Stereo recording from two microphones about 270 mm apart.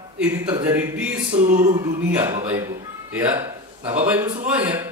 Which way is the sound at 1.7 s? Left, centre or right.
Centre.